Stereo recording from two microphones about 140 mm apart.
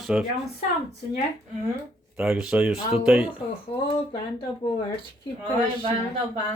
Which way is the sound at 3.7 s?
40° left (ahead or behind).